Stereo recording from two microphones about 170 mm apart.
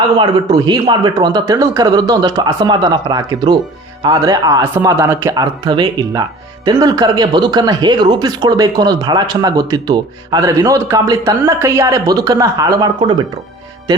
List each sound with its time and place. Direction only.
0.2 s speech: 25° right (ahead or behind)